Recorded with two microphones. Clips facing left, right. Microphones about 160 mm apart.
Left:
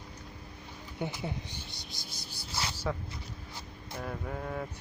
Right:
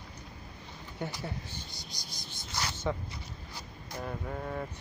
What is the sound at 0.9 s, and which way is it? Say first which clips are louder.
Speech: left 2 dB; 15° left (ahead or behind).